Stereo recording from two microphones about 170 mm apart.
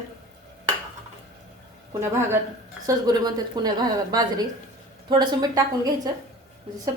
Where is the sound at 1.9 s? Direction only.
15° right (ahead or behind).